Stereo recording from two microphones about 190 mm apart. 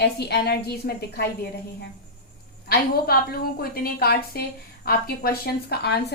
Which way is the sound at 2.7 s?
50° left (ahead or behind).